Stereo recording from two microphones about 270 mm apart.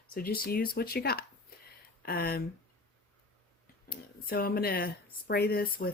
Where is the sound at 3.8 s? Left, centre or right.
Left.